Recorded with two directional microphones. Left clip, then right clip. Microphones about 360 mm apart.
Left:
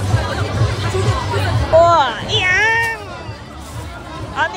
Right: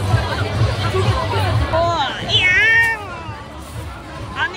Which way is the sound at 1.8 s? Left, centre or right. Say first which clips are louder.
Left 8 dB; left.